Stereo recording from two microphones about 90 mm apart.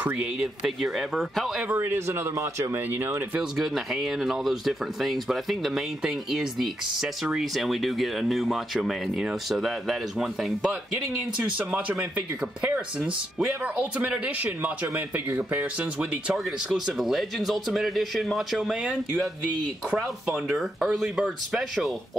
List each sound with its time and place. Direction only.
0.0 s speech: 15° right (ahead or behind)
1.7 s speech: 25° right (ahead or behind)
3.3 s speech: 5° right (ahead or behind)
16.6 s speech: centre (ahead or behind)